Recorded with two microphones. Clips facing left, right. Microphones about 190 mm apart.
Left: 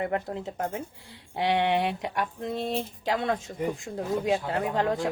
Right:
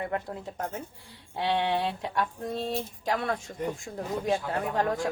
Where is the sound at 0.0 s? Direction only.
20° left (ahead or behind).